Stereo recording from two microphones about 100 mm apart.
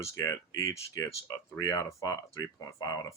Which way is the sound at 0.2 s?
35° left (ahead or behind).